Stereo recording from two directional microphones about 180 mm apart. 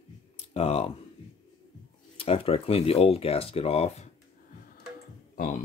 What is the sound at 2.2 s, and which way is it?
Speech, 30° left (ahead or behind).